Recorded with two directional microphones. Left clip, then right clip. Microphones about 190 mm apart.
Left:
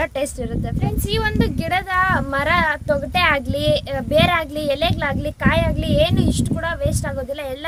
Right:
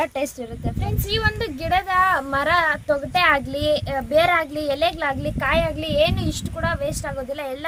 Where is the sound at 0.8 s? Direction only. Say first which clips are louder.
Even; 15° left (ahead or behind).